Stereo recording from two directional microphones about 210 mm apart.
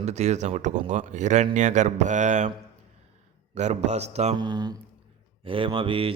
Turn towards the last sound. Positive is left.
turn(degrees=-25)  # may be behind; listen again after turning